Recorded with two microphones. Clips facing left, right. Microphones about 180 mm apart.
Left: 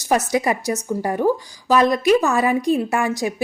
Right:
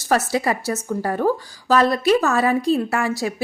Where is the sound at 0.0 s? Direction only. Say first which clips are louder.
Left 1 dB; 15° left (ahead or behind).